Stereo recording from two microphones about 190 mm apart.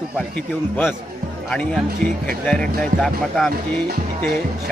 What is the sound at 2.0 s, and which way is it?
Speech, 45° right (ahead or behind).